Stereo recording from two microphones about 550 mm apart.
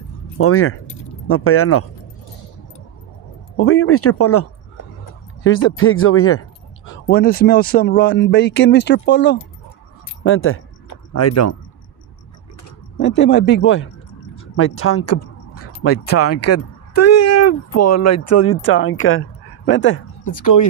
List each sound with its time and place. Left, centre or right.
0.4 s speech: left
3.5 s speech: left
13.0 s speech: centre
20.2 s speech: left